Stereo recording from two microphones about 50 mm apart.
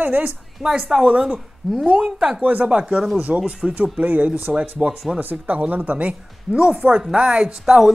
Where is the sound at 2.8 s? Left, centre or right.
Centre.